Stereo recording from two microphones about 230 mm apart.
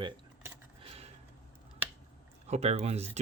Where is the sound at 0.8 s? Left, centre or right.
Right.